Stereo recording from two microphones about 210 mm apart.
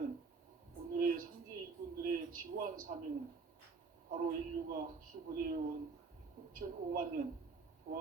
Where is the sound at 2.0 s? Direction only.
40° right (ahead or behind).